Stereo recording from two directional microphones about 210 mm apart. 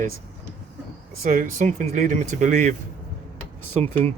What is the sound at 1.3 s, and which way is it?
Speech, 35° right (ahead or behind).